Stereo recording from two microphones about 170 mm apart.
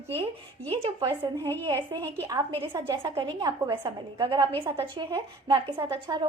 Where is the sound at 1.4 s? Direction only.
10° left (ahead or behind).